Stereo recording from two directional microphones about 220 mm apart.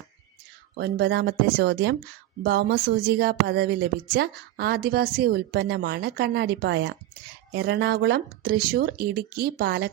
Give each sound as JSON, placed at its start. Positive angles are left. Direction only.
{"t": 0.8, "sound": "a woman's voice", "side_deg": -50}